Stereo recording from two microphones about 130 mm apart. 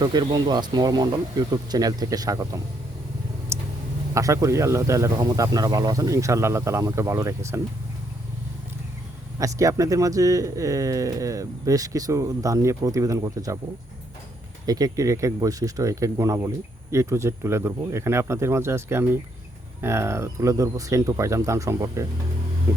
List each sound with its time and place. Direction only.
0.0 s speech: 35° right (ahead or behind)
3.5 s a sound: 20° right (ahead or behind)
4.1 s speech: 25° right (ahead or behind)
9.4 s speech: 25° right (ahead or behind)
14.7 s speech: 30° right (ahead or behind)